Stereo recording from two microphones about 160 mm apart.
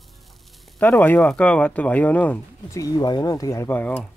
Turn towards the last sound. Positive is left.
turn(degrees=10)  # may be behind; listen again after turning